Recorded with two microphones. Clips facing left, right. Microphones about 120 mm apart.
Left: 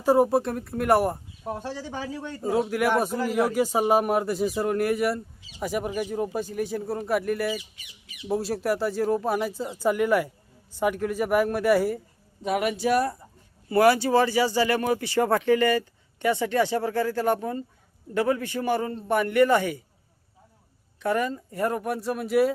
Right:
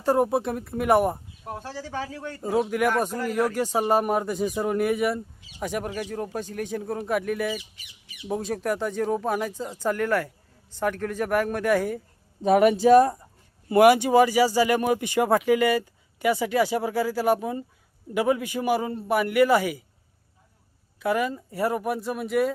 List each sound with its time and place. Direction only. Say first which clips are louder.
0.0 s speech: left 2 dB; 5° left (ahead or behind)
1.5 s speech: left 3 dB; 15° left (ahead or behind)
2.4 s speech: right 1 dB; centre (ahead or behind)
12.4 s speech: right 7 dB; 40° right (ahead or behind)
13.7 s speech: right 3 dB; 15° right (ahead or behind)
21.0 s speech: right 1 dB; 5° right (ahead or behind)